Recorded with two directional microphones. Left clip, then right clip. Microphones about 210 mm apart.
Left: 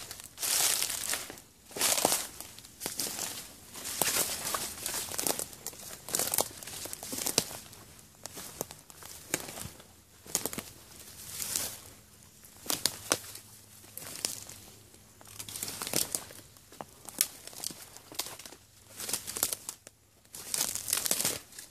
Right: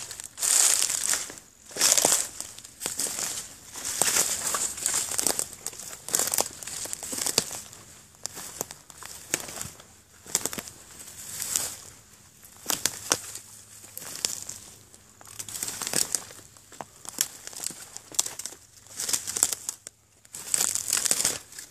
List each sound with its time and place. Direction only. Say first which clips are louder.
0.2 s crumpling: right 6 dB; 35° right (ahead or behind)
8.2 s a sound: right 5 dB; 35° right (ahead or behind)
10.2 s bird: right 5 dB; 35° right (ahead or behind)
11.6 s a sound: right 6 dB; 35° right (ahead or behind)
12.6 s crumpling: right 4 dB; 35° right (ahead or behind)
15.3 s crumpling: right 5 dB; 35° right (ahead or behind)